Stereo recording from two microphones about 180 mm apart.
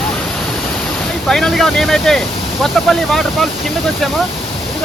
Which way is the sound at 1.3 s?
Centre (ahead or behind).